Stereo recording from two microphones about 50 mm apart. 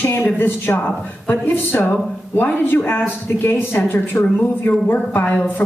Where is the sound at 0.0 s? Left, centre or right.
Left.